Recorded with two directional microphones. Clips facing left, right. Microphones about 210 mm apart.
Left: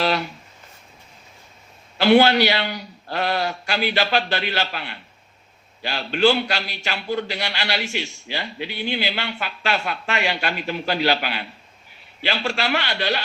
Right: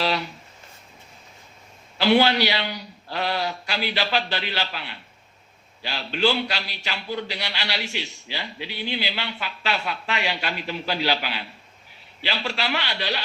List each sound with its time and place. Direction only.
0.0 s speech: 50° left (ahead or behind)
2.0 s a man's voice: 50° left (ahead or behind)